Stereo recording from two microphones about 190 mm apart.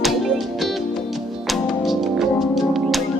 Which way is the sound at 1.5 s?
Centre (ahead or behind).